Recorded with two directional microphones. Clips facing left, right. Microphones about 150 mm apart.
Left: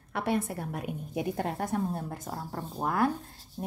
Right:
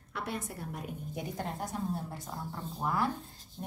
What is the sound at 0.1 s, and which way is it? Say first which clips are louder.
A woman's voice: left 8 dB; 65° left (ahead or behind).